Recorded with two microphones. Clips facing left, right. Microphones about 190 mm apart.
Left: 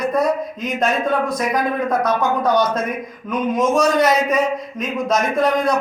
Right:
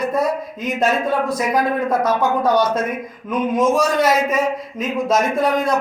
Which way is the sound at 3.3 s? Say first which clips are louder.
Right 1 dB; 5° right (ahead or behind).